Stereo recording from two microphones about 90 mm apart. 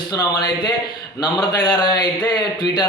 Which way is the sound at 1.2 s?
50° left (ahead or behind).